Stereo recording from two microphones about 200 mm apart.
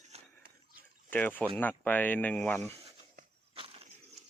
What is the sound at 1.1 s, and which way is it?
Speech, 10° left (ahead or behind).